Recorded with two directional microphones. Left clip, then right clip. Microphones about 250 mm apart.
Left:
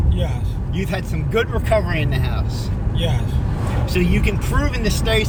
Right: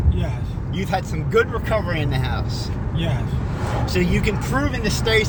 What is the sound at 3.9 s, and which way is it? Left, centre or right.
Speech, right.